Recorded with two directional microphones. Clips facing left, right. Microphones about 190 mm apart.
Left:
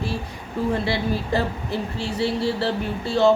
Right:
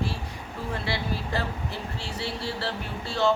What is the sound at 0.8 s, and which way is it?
A woman's voice, 20° left (ahead or behind).